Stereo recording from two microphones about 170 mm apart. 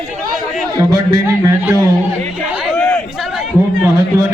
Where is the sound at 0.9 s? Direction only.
20° right (ahead or behind).